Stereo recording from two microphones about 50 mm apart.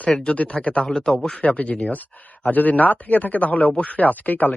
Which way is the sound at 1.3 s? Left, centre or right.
Left.